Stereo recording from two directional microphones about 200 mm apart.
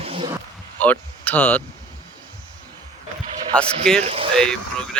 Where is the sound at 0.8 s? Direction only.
10° left (ahead or behind).